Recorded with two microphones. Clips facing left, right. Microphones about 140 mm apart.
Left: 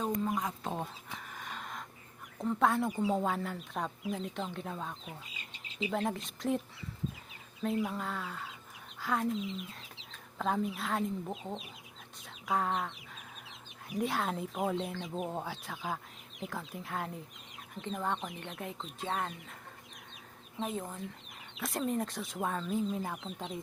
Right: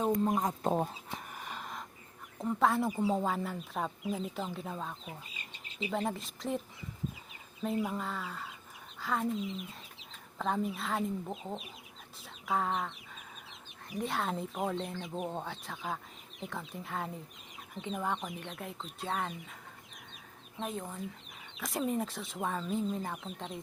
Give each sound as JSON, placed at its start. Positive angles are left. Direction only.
{"t": 0.2, "sound": "speech", "side_deg": -40}
{"t": 1.3, "sound": "a sound", "side_deg": -5}
{"t": 2.4, "sound": "speech", "side_deg": 0}
{"t": 7.9, "sound": "speech", "side_deg": 0}
{"t": 9.0, "sound": "a sound", "side_deg": 0}
{"t": 10.3, "sound": "speech", "side_deg": 0}
{"t": 12.2, "sound": "chicken", "side_deg": 0}
{"t": 13.8, "sound": "speech", "side_deg": 0}
{"t": 20.6, "sound": "speech", "side_deg": 0}